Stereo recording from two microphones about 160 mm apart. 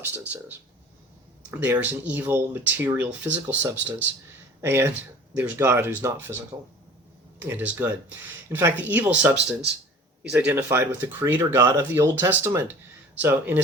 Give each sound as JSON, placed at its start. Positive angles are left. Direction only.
{"t": 0.0, "sound": "speech", "side_deg": -15}
{"t": 7.3, "sound": "speech", "side_deg": -10}